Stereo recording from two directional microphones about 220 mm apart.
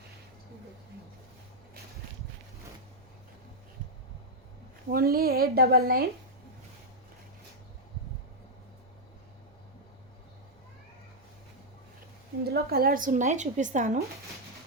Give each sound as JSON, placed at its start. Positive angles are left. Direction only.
{"t": 4.9, "sound": "a woman's voice", "side_deg": -40}
{"t": 12.5, "sound": "a woman's voice", "side_deg": -45}